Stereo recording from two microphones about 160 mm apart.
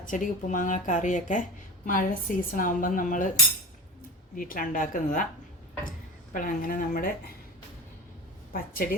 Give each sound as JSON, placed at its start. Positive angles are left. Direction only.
{"t": 0.0, "sound": "speech", "side_deg": 55}
{"t": 4.4, "sound": "speech", "side_deg": 60}
{"t": 6.3, "sound": "speech", "side_deg": 60}
{"t": 8.5, "sound": "speech", "side_deg": 60}